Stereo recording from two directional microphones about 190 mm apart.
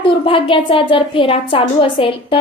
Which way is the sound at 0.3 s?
30° left (ahead or behind).